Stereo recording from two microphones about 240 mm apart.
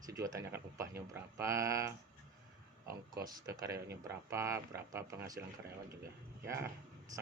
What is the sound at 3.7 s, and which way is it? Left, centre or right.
Speech, right.